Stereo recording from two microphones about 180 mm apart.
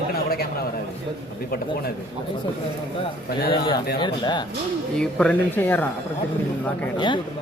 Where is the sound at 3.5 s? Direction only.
25° left (ahead or behind).